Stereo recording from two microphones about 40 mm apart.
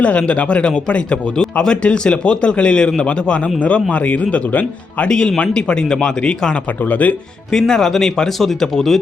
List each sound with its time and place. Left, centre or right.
0.0 s a man's voice: left
5.0 s a man's voice: left
6.8 s speech: left
7.5 s speech: centre